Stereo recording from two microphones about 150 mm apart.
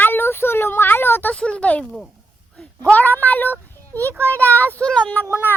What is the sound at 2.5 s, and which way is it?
Speech, 5° left (ahead or behind).